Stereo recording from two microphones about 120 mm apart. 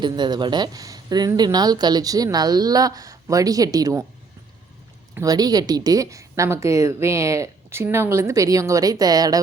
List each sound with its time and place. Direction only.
0.0 s a woman's voice: 40° right (ahead or behind)
5.2 s speech: 30° right (ahead or behind)